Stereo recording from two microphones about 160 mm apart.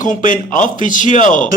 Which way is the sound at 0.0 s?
55° left (ahead or behind).